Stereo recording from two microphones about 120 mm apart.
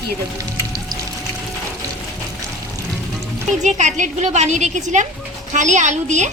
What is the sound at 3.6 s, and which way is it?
A woman's voice, 90° right.